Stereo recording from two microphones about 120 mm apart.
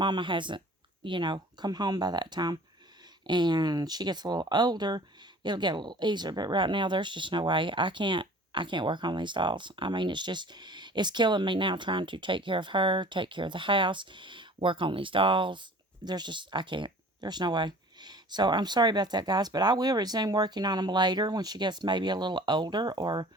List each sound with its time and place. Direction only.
0.0 s speech: 40° right (ahead or behind)